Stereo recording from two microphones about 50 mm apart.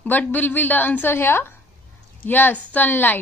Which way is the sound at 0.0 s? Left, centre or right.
Left.